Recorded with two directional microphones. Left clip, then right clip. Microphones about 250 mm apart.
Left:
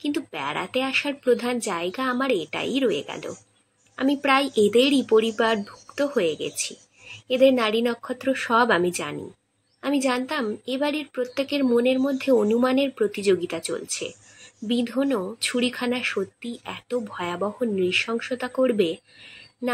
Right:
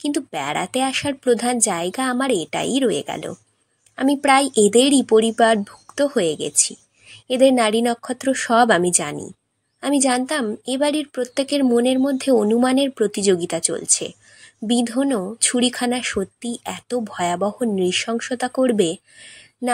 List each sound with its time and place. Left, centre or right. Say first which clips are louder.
0.0 s speech: right 4 dB; right